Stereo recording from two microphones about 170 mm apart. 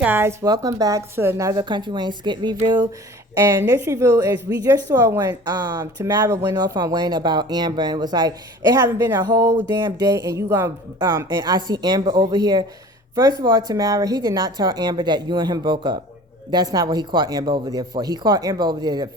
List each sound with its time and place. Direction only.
0.0 s a woman's voice: 15° right (ahead or behind)